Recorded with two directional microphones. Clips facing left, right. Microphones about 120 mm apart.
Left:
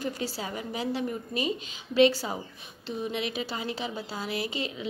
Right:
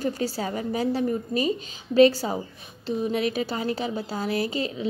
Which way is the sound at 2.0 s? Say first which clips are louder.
Right 5 dB; 40° right (ahead or behind).